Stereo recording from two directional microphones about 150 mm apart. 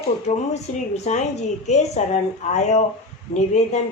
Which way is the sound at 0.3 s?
45° left (ahead or behind).